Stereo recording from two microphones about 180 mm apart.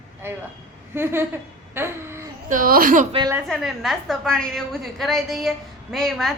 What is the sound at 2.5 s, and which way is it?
Speech, 50° right (ahead or behind).